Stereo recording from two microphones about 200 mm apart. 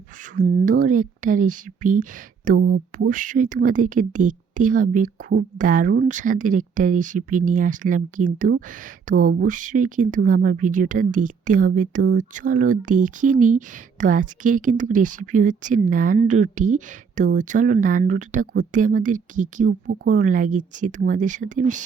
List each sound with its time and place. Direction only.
0.6 s speech: 40° right (ahead or behind)